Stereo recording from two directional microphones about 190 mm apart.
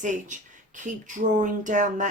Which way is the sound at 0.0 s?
40° right (ahead or behind).